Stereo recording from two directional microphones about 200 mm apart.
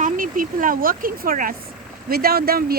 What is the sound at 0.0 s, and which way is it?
Speech, 45° right (ahead or behind).